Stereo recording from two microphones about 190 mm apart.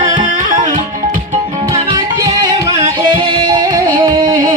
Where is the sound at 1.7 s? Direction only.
20° right (ahead or behind).